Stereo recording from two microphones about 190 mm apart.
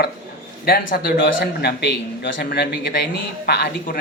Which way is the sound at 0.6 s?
55° left (ahead or behind).